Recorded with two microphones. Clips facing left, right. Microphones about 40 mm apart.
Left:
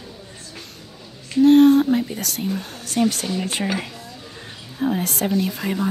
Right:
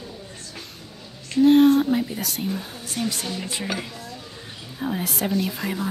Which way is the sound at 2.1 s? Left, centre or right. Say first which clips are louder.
Left 1 dB; centre.